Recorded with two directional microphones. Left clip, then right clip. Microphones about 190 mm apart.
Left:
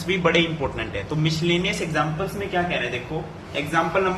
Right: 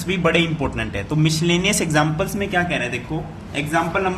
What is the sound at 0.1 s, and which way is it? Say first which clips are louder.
Speech: right 1 dB; 30° right (ahead or behind).